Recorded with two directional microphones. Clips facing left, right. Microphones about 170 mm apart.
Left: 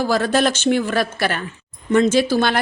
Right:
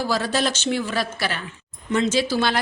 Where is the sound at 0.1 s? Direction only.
55° left (ahead or behind).